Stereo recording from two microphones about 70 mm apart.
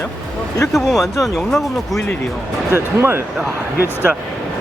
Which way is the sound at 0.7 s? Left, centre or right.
Centre.